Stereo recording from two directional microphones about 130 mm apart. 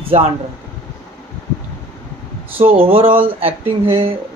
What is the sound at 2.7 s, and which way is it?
A man's voice, 45° right (ahead or behind).